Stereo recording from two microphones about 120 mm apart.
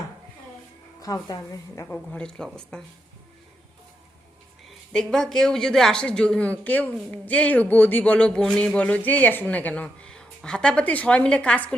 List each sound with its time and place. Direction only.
1.0 s a woman's voice: 30° left (ahead or behind)
1.9 s a man's voice: 10° left (ahead or behind)
4.9 s a man's voice: 5° left (ahead or behind)